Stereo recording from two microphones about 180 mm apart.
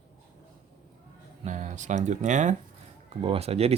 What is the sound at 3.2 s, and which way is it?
Speech, 35° right (ahead or behind).